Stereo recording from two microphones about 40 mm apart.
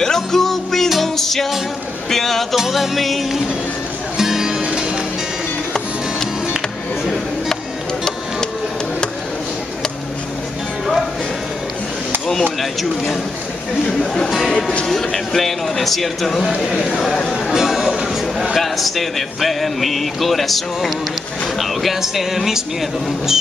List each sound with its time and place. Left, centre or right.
0.0 s music: centre
2.0 s a sound: centre
2.5 s speech: centre
4.2 s music: centre
13.8 s speech: left
14.2 s speech: centre
14.9 s speech: centre
17.5 s music: centre
18.4 s speech: centre